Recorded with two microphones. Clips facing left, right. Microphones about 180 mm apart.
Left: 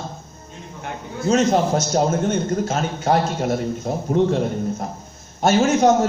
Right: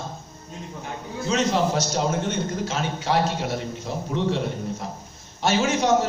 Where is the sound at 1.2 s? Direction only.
45° left (ahead or behind).